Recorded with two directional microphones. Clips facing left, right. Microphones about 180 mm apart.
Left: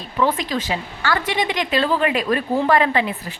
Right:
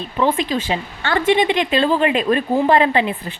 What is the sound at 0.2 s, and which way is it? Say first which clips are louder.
A woman's voice: right 2 dB; 25° right (ahead or behind).